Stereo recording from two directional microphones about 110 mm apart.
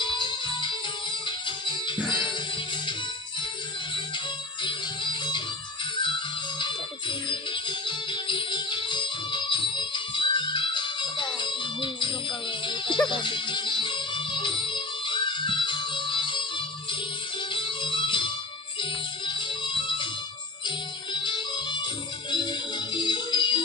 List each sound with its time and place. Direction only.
0.0 s music: 45° left (ahead or behind)
4.6 s music: 45° left (ahead or behind)